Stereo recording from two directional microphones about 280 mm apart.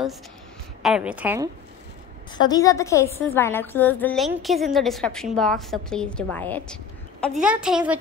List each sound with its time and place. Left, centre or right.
0.8 s a woman's voice: centre
2.3 s a woman's voice: centre